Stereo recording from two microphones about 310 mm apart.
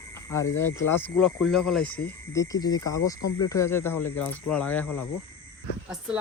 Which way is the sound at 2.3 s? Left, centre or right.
Centre.